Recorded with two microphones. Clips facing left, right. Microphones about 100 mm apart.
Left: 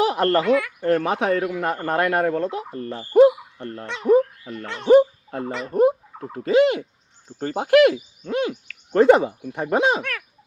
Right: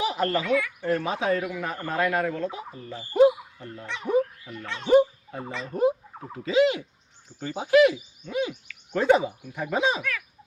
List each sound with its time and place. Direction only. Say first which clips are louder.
0.0 s speech: left 7 dB; 65° left (ahead or behind)
4.7 s speech: left 6 dB; 45° left (ahead or behind)
5.3 s a child's voice: left 6 dB; 65° left (ahead or behind)
6.3 s speech: left 4 dB; 50° left (ahead or behind)